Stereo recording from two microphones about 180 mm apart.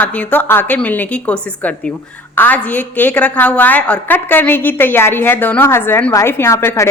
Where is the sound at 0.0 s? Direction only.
10° left (ahead or behind).